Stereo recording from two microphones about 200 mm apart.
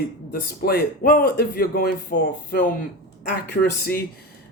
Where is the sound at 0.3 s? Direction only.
50° left (ahead or behind).